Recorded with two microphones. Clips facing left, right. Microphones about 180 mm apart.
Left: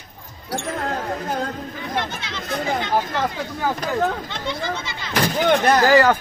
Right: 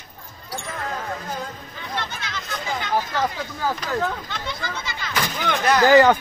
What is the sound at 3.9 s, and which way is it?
Speech, 40° left (ahead or behind).